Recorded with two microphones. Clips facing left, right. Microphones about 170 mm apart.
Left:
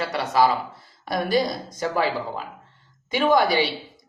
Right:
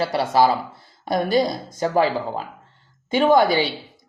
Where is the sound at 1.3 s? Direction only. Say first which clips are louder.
Right 3 dB; 30° right (ahead or behind).